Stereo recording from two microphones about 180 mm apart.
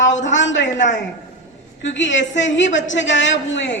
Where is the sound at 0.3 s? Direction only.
90° left.